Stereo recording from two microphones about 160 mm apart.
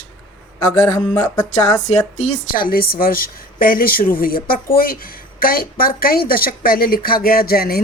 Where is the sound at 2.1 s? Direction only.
55° left (ahead or behind).